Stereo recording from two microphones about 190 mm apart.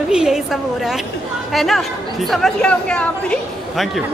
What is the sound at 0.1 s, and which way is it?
A man's voice, 5° right (ahead or behind).